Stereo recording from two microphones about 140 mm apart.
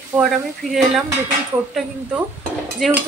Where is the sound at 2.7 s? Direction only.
Centre (ahead or behind).